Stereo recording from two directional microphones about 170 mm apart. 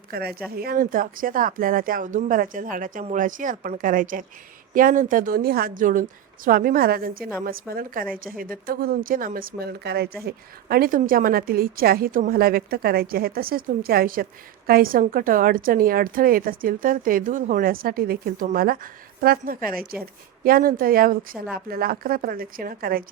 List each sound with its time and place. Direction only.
0.1 s a woman's voice: 65° right (ahead or behind)